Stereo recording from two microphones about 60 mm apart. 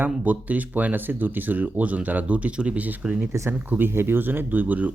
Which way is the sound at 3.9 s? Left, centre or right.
Right.